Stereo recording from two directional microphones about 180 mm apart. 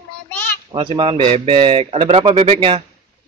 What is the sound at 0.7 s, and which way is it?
A man's voice, 30° right (ahead or behind).